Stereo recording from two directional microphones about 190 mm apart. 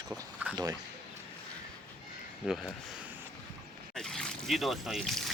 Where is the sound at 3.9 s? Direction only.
Centre (ahead or behind).